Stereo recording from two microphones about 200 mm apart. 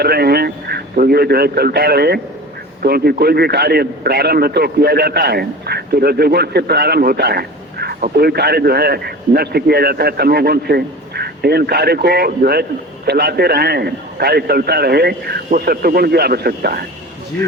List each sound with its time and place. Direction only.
0.0 s a man's voice: 50° right (ahead or behind)